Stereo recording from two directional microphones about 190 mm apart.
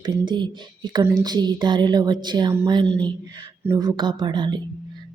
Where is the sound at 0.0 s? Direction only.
25° right (ahead or behind).